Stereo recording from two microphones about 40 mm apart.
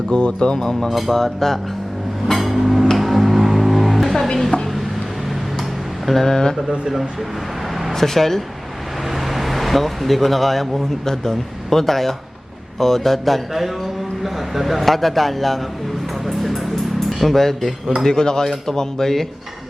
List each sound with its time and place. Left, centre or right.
0.1 s speech: left
0.9 s speech: centre
1.1 s speech: centre
2.2 s music: centre
6.1 s speech: centre
6.7 s speech: centre
7.9 s speech: centre
9.1 s a sound: centre
11.0 s speech: centre
16.2 s music: centre
18.0 s speech: centre